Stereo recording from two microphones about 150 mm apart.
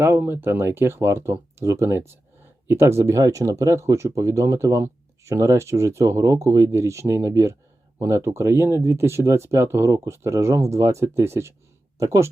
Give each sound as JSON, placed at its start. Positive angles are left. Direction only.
{"t": 0.0, "sound": "speech", "side_deg": -15}